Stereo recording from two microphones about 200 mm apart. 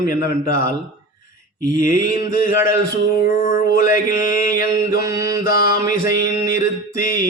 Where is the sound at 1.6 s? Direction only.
40° left (ahead or behind).